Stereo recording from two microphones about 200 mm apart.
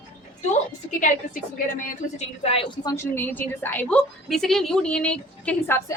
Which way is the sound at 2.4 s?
30° left (ahead or behind).